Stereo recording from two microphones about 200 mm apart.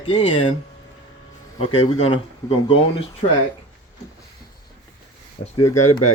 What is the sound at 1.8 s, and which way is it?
Speech, 30° left (ahead or behind).